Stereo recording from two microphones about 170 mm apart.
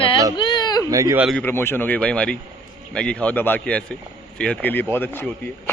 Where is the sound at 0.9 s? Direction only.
20° right (ahead or behind).